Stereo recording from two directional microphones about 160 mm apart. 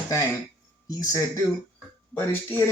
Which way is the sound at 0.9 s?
25° left (ahead or behind).